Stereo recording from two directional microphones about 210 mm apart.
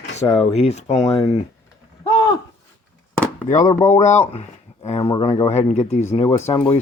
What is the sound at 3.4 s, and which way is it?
Speech, 35° left (ahead or behind).